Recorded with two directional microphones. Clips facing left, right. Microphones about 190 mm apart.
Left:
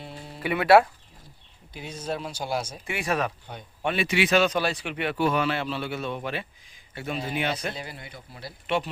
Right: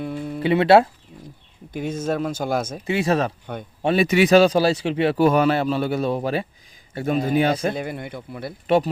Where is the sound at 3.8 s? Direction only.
40° right (ahead or behind).